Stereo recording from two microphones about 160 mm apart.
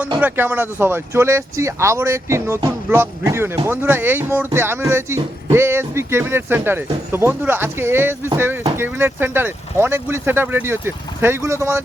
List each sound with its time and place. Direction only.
0.2 s speech: 10° right (ahead or behind)